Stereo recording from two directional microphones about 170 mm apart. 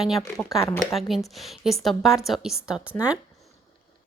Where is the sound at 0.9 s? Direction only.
Centre (ahead or behind).